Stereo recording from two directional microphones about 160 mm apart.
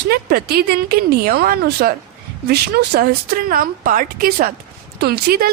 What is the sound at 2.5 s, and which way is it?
Speech, 90° right.